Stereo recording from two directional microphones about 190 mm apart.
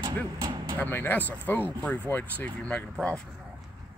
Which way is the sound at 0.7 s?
10° left (ahead or behind).